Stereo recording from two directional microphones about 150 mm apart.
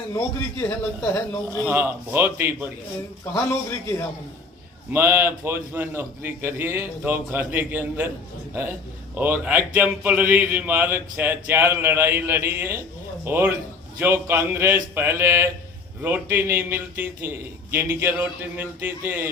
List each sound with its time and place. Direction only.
0.1 s a man's voice: 20° left (ahead or behind)
1.6 s a man's voice: 15° right (ahead or behind)
3.3 s a man's voice: 20° left (ahead or behind)
4.9 s a man's voice: 15° right (ahead or behind)
9.1 s a man's voice: 10° right (ahead or behind)